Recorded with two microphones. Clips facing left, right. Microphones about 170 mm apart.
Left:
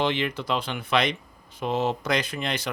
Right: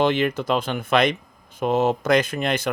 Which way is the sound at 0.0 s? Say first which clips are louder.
Right 6 dB; 45° right (ahead or behind).